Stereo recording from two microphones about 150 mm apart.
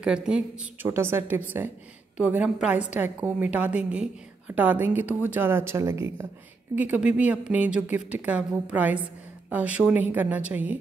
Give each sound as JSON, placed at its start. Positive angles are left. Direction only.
{"t": 0.0, "sound": "a woman's voice", "side_deg": -5}